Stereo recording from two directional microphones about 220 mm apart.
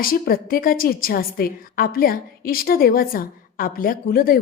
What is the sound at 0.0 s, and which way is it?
A woman's voice, 40° left (ahead or behind).